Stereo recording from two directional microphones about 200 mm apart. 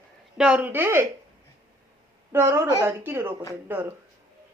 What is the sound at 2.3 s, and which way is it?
A woman's voice, 10° right (ahead or behind).